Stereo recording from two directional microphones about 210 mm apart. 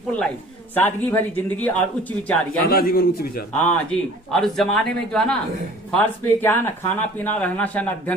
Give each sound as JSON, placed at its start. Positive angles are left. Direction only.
{"t": 0.7, "sound": "speech", "side_deg": 10}
{"t": 2.6, "sound": "a man's voice", "side_deg": 45}
{"t": 3.5, "sound": "a man's voice", "side_deg": 5}